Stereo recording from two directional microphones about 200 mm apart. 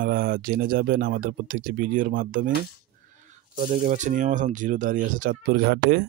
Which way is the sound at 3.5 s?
35° right (ahead or behind).